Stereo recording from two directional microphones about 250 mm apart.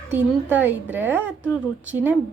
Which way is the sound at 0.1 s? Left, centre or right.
Centre.